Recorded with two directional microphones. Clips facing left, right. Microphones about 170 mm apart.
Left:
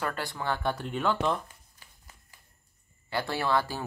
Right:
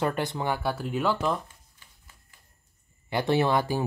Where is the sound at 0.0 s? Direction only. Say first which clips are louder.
Right 5 dB; 20° right (ahead or behind).